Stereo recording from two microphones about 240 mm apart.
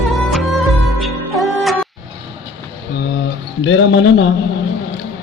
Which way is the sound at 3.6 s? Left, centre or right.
Left.